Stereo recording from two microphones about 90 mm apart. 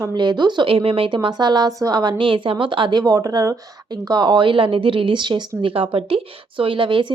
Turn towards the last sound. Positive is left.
turn(degrees=-70)  # may be behind; listen again after turning